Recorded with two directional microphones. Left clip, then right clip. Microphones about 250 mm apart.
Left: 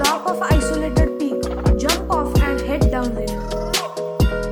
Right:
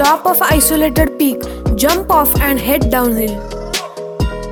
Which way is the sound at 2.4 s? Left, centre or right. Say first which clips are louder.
Right 6 dB; right.